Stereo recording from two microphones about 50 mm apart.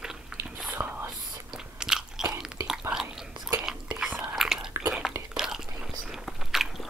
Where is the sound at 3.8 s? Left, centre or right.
Right.